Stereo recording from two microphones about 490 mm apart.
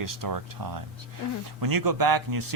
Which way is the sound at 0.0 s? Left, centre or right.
Right.